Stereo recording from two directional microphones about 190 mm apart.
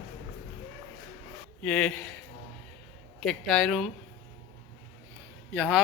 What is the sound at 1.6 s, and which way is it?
A man's voice, 5° left (ahead or behind).